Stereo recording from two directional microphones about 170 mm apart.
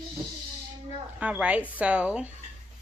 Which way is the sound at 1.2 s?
5° right (ahead or behind).